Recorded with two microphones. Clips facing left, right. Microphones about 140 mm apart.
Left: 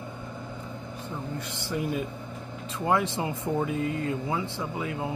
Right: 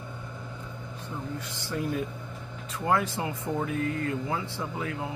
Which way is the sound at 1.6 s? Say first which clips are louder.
Left 1 dB; 15° left (ahead or behind).